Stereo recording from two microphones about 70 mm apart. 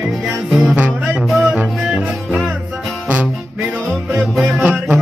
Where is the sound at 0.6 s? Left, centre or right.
Centre.